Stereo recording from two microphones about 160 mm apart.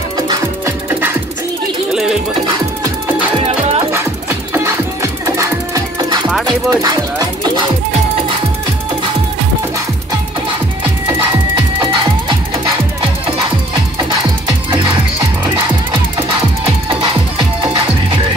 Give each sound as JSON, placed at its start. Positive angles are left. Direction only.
{"t": 0.3, "sound": "music", "side_deg": -20}
{"t": 1.9, "sound": "music", "side_deg": -5}
{"t": 3.3, "sound": "music", "side_deg": -40}
{"t": 3.9, "sound": "music", "side_deg": -15}
{"t": 6.4, "sound": "speech", "side_deg": -25}